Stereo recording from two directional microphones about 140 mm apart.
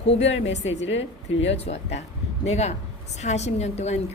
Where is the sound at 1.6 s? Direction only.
50° left (ahead or behind).